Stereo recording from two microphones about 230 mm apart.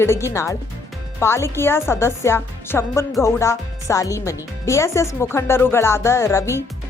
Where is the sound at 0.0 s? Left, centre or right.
Centre.